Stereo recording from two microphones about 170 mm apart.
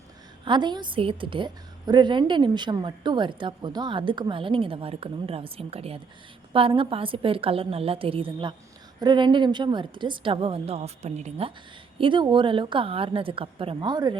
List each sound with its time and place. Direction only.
0.4 s a woman's voice: 25° right (ahead or behind)
11.9 s a woman's voice: 30° right (ahead or behind)